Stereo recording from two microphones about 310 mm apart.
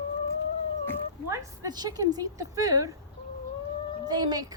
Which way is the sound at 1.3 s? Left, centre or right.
Centre.